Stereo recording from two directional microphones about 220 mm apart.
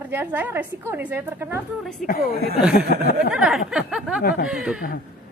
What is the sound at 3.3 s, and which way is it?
A woman's voice, 5° right (ahead or behind).